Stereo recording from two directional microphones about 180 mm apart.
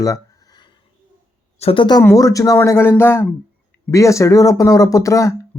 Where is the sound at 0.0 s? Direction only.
20° left (ahead or behind).